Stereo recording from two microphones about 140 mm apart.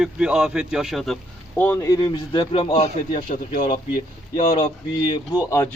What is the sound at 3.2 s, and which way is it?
Speech, 90° left.